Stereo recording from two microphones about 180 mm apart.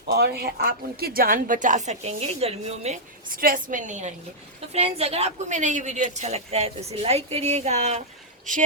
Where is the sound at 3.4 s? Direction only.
50° right (ahead or behind).